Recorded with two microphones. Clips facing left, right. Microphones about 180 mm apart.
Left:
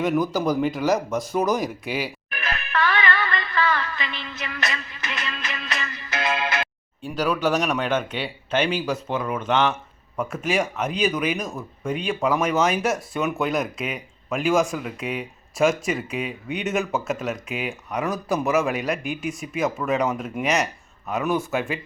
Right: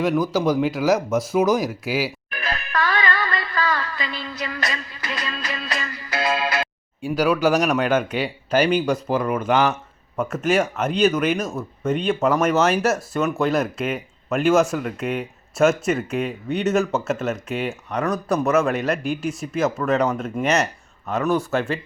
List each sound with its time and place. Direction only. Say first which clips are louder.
0.0 s speech: right 2 dB; centre (ahead or behind)
2.4 s music: even; 35° right (ahead or behind)
5.9 s music: right 3 dB; 20° left (ahead or behind)
6.1 s music: right 3 dB; 30° right (ahead or behind)
7.0 s speech: right 4 dB; 10° right (ahead or behind)
16.5 s speech: right 7 dB; 15° left (ahead or behind)
16.7 s speech: right 4 dB; centre (ahead or behind)